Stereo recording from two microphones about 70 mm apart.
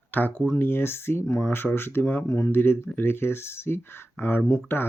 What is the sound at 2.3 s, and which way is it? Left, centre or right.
Speech, left.